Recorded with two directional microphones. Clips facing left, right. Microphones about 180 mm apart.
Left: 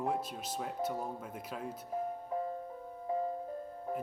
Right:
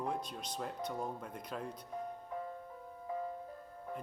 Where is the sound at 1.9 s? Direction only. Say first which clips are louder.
Left 8 dB; 35° left (ahead or behind).